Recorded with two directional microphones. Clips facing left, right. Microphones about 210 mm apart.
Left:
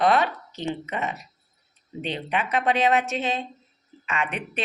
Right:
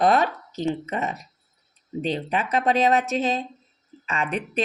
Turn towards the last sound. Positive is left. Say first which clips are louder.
# right 3 dB
turn(degrees=-40)  # may be behind; listen again after turning